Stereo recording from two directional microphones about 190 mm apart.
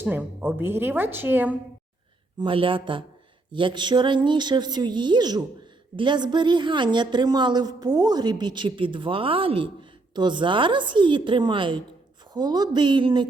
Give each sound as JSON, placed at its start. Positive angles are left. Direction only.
{"t": 0.0, "sound": "a woman's voice", "side_deg": -10}
{"t": 2.4, "sound": "a woman's voice", "side_deg": -25}